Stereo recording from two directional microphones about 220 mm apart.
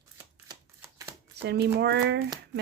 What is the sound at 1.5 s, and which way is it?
Speech, 50° right (ahead or behind).